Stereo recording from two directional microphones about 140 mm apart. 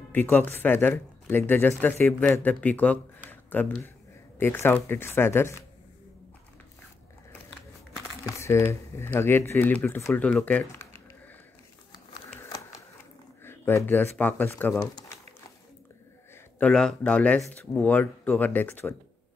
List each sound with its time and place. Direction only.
0.1 s speech: 15° left (ahead or behind)
3.3 s a sound: 15° left (ahead or behind)
4.4 s speech: 15° left (ahead or behind)
8.2 s speech: 20° left (ahead or behind)
13.4 s speech: 15° left (ahead or behind)
14.8 s speech: 25° left (ahead or behind)
16.5 s speech: 5° left (ahead or behind)